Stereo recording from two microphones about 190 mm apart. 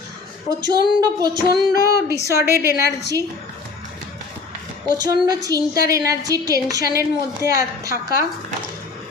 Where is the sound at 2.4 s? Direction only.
15° right (ahead or behind).